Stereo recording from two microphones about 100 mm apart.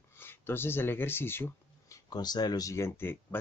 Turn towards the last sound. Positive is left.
turn(degrees=20)  # may be behind; listen again after turning